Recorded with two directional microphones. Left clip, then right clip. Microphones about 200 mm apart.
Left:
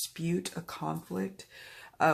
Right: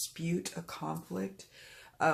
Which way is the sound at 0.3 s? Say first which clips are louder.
Left 3 dB; 35° left (ahead or behind).